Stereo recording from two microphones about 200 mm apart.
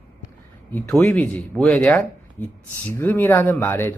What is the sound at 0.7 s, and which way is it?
Speech, 10° left (ahead or behind).